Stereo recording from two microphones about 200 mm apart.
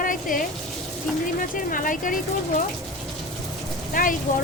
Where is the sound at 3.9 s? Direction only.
40° left (ahead or behind).